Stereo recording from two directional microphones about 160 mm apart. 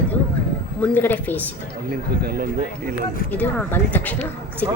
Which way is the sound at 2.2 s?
65° right (ahead or behind).